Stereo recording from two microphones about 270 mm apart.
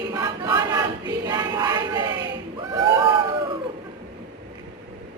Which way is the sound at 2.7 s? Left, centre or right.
Centre.